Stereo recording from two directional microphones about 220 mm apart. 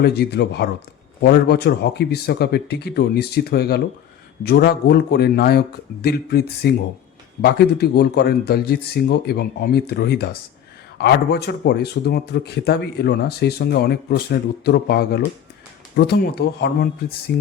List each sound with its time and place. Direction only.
0.0 s speech: 45° left (ahead or behind)